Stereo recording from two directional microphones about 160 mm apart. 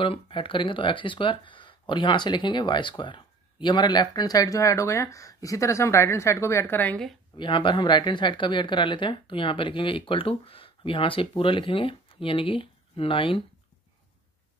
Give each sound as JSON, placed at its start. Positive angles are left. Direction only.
{"t": 0.0, "sound": "speech", "side_deg": 35}
{"t": 7.3, "sound": "speech", "side_deg": 30}